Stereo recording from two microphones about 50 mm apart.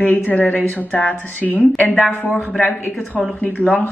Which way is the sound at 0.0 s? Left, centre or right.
Left.